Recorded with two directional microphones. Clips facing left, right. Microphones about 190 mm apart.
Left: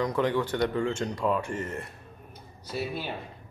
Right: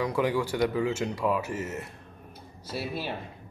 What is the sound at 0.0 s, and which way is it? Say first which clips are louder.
A man's voice: even; 10° right (ahead or behind).